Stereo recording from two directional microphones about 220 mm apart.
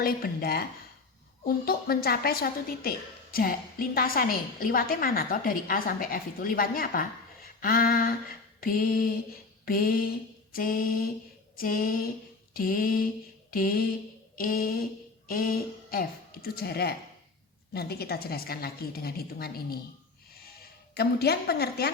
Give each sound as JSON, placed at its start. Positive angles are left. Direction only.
{"t": 0.0, "sound": "a woman's voice", "side_deg": 45}